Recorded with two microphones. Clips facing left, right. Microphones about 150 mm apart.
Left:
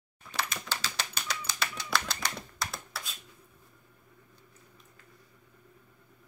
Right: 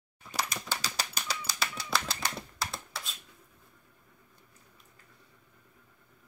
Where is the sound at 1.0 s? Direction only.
40° right (ahead or behind).